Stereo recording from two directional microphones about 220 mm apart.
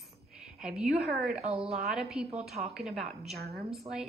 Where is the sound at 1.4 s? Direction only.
25° right (ahead or behind).